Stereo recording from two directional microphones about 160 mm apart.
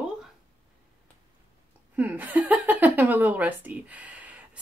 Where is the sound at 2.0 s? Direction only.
10° right (ahead or behind).